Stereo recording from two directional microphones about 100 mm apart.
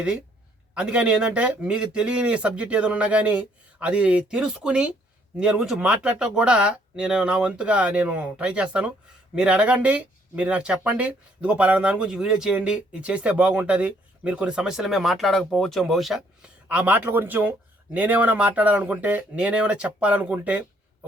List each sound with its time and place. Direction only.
0.7 s speech: 10° right (ahead or behind)
16.6 s speech: 15° right (ahead or behind)